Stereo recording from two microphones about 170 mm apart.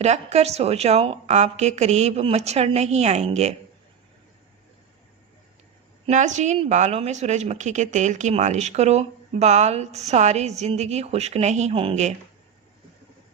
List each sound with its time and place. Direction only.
0.0 s a woman's voice: 40° right (ahead or behind)
6.1 s a woman's voice: 45° right (ahead or behind)